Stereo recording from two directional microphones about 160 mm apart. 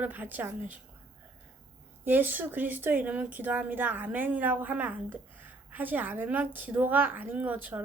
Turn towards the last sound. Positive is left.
turn(degrees=-10)  # may be behind; listen again after turning